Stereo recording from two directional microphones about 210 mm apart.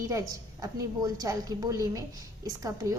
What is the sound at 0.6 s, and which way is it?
A woman's voice, 15° right (ahead or behind).